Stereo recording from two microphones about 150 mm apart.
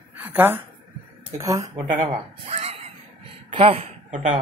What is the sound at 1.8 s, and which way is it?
Speech, 45° right (ahead or behind).